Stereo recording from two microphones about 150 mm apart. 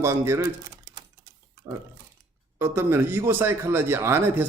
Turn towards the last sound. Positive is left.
turn(degrees=-15)  # may be behind; listen again after turning